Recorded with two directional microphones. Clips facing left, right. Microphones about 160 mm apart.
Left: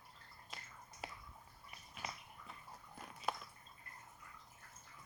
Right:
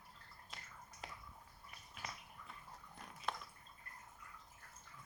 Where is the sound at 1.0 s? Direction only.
5° left (ahead or behind).